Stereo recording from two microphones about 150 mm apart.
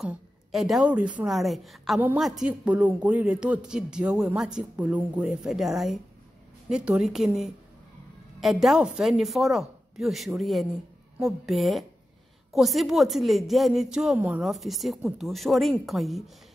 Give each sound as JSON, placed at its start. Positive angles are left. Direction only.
{"t": 0.0, "sound": "a woman's voice", "side_deg": 0}